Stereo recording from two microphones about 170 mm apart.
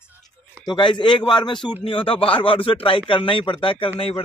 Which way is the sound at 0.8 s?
30° left (ahead or behind).